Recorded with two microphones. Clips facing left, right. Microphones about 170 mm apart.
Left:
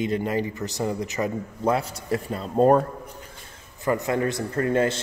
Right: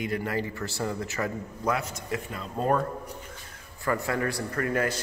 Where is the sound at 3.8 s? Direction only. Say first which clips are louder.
Left 4 dB; 20° left (ahead or behind).